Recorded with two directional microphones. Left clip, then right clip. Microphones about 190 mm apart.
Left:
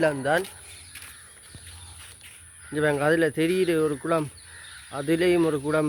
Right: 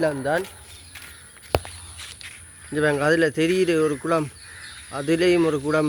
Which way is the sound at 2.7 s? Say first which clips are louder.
Right 2 dB; 5° left (ahead or behind).